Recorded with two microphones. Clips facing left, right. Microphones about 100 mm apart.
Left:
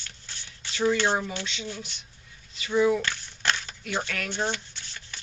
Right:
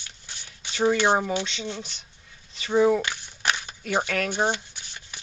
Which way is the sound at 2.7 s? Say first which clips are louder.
Right 3 dB; 45° right (ahead or behind).